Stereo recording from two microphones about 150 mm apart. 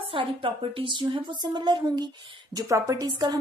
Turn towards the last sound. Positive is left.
turn(degrees=-25)  # may be behind; listen again after turning